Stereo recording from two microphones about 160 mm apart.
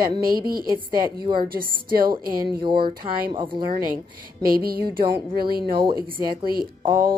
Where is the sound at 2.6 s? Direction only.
30° right (ahead or behind).